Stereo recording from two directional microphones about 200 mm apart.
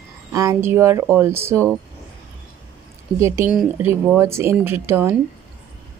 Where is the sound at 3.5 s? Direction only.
5° right (ahead or behind).